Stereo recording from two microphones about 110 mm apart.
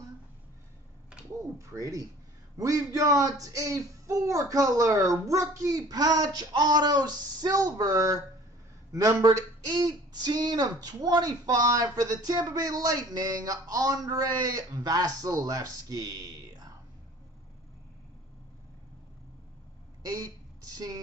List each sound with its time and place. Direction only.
1.4 s speech: 30° right (ahead or behind)
20.7 s speech: 35° right (ahead or behind)